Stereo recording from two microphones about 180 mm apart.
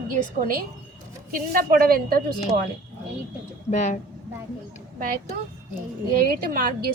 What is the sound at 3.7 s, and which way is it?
Speech, 40° left (ahead or behind).